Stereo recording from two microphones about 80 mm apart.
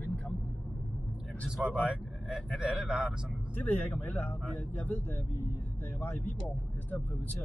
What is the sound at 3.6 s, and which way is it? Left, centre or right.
Speech, left.